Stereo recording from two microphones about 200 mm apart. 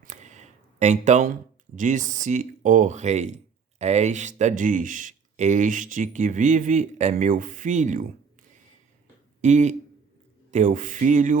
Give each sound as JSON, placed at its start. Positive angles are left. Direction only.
{"t": 0.0, "sound": "speech", "side_deg": -35}
{"t": 9.4, "sound": "speech", "side_deg": -35}